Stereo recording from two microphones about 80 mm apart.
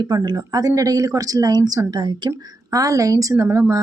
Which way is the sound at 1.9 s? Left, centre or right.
Right.